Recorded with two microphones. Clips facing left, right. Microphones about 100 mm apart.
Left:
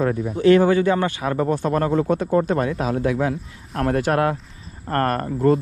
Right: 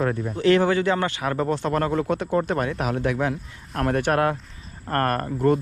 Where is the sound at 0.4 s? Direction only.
30° left (ahead or behind).